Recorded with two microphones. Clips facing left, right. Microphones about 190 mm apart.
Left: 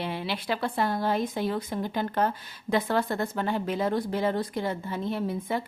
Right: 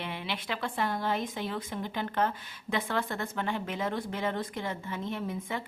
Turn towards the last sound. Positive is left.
turn(degrees=35)  # may be behind; listen again after turning